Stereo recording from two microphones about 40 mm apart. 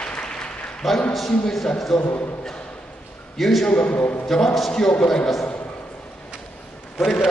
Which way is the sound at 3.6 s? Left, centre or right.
Left.